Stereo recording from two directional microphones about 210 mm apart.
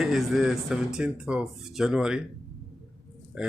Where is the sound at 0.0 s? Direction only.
Centre (ahead or behind).